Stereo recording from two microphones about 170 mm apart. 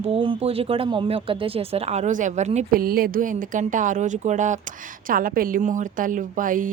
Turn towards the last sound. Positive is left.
turn(degrees=-50)  # may be behind; listen again after turning